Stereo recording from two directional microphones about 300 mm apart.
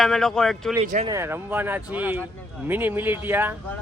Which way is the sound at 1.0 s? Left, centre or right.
Centre.